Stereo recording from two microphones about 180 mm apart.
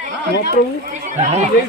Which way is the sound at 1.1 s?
35° right (ahead or behind).